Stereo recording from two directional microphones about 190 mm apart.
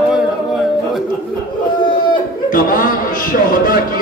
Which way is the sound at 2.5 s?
50° left (ahead or behind).